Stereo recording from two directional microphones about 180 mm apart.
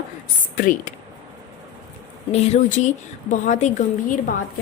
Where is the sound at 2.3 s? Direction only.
35° left (ahead or behind).